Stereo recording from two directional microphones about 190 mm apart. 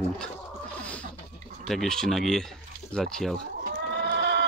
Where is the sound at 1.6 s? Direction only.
Centre (ahead or behind).